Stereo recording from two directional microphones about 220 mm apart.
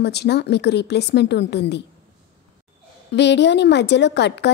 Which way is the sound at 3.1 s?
50° left (ahead or behind).